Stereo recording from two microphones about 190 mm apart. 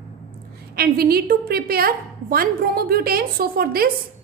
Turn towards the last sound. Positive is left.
turn(degrees=-50)  # may be behind; listen again after turning